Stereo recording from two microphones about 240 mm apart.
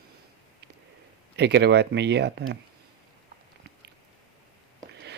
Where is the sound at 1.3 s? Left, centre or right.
Right.